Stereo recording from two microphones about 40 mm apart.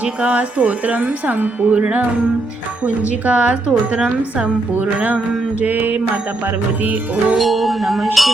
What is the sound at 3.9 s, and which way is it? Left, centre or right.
Speech, right.